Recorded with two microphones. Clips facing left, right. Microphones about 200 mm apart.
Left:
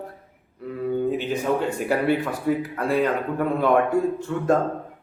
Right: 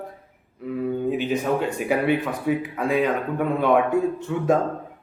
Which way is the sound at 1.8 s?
Centre (ahead or behind).